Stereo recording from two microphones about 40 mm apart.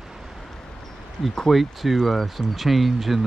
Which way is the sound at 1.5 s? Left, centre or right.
Centre.